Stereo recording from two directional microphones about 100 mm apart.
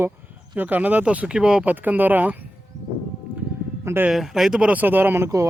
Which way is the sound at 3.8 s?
25° right (ahead or behind).